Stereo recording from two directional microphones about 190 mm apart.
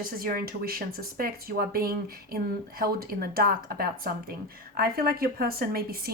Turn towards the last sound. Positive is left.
turn(degrees=-55)  # may be behind; listen again after turning